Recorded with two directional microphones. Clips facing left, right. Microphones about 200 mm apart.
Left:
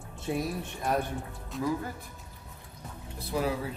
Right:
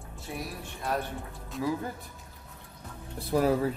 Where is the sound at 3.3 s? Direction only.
45° right (ahead or behind).